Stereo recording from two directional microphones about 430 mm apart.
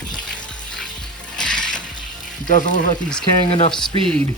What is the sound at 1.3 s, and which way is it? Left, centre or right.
Mechanisms, centre.